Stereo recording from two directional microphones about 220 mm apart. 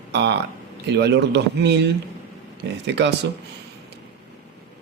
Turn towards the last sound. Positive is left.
turn(degrees=-50)  # may be behind; listen again after turning